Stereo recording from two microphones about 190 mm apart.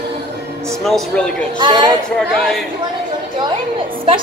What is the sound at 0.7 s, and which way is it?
Speech, centre (ahead or behind).